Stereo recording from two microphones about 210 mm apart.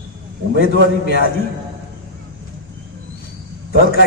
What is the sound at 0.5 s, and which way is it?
Speech, 50° left (ahead or behind).